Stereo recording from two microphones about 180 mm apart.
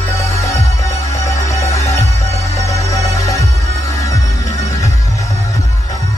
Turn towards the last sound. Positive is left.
turn(degrees=20)  # may be behind; listen again after turning